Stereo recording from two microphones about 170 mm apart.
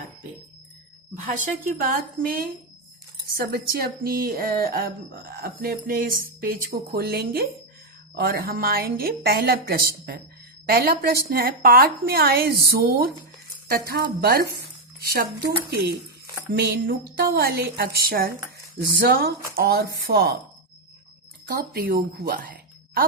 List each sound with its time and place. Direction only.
1.1 s speech: 50° right (ahead or behind)
1.8 s a woman's voice: 60° right (ahead or behind)
21.4 s a woman's voice: 65° right (ahead or behind)